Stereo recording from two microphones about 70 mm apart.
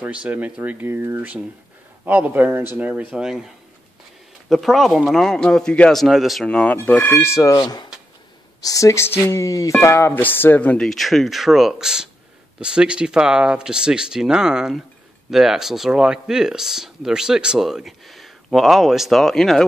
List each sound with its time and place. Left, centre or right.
0.0 s speech: centre
2.8 s speech: right
3.1 s speech: centre
4.5 s speech: centre
6.0 s speech: centre
6.4 s speech: centre; by 7.5 s left
7.5 s speech: left
8.6 s speech: left
9.8 s speech: left
10.1 s speech: left
10.8 s speech: centre